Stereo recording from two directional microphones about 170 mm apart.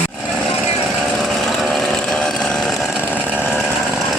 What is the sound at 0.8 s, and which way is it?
Chainsaw, centre (ahead or behind).